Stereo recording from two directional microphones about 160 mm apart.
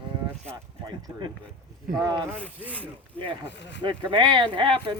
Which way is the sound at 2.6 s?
10° left (ahead or behind).